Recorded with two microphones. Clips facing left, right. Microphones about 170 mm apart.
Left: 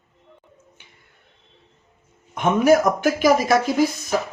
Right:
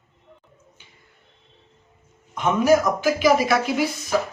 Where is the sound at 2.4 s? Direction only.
60° left (ahead or behind).